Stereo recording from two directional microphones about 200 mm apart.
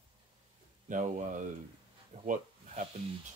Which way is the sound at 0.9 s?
40° right (ahead or behind).